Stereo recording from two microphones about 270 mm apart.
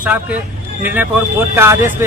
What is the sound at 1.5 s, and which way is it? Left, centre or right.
Speech, centre.